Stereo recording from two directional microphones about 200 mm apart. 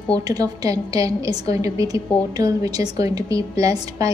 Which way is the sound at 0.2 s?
20° right (ahead or behind).